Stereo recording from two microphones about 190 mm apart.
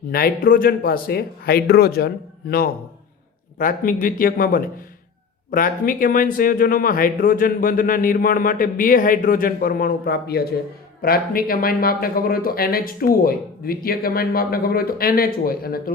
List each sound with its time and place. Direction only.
0.1 s speech: 50° left (ahead or behind)